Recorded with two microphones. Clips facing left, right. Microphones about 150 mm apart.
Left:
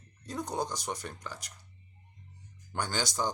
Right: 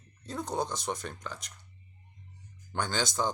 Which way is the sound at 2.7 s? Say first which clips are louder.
Right 2 dB; 10° left (ahead or behind).